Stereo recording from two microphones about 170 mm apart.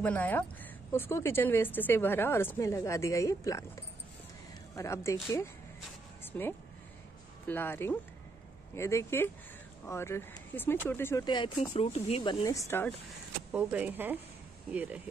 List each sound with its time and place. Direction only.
0.0 s speech: 10° left (ahead or behind)
6.2 s a sound: 10° left (ahead or behind)
7.4 s speech: 10° left (ahead or behind)
11.2 s speech: 25° left (ahead or behind)
13.5 s speech: 5° right (ahead or behind)